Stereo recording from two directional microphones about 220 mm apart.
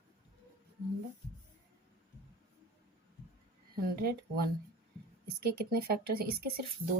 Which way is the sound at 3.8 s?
45° right (ahead or behind).